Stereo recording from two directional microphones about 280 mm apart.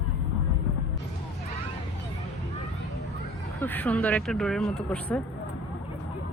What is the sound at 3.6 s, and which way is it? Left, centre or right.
Speech, centre.